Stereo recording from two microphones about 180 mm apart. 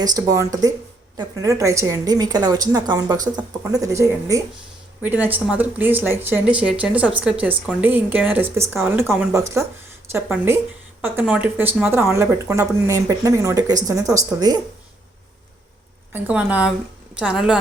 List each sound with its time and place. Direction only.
0.0 s speech: 20° right (ahead or behind)
16.1 s speech: 10° right (ahead or behind)